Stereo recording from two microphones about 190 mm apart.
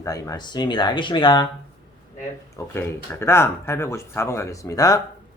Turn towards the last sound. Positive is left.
turn(degrees=20)  # may be behind; listen again after turning